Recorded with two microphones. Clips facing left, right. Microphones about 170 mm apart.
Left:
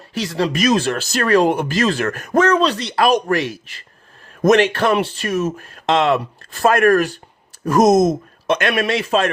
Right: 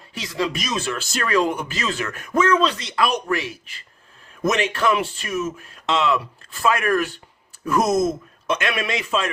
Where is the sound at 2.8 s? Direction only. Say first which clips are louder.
Left 6 dB; 65° left (ahead or behind).